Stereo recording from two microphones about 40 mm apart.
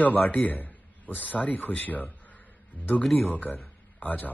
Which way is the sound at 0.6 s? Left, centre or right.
Left.